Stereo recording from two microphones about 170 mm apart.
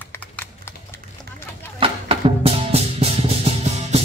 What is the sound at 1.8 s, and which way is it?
Music, 35° right (ahead or behind).